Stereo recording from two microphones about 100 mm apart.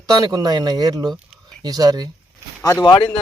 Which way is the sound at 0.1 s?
40° right (ahead or behind).